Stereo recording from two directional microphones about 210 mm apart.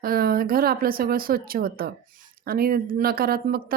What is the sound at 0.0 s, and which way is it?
Speech, 45° right (ahead or behind).